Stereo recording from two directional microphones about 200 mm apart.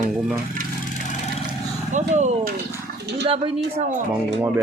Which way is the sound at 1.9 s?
35° right (ahead or behind).